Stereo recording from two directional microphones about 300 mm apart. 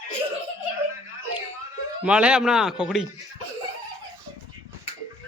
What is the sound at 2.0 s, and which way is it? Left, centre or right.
Speech, centre.